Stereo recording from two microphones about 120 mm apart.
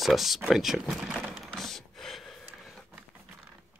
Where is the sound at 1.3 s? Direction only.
Centre (ahead or behind).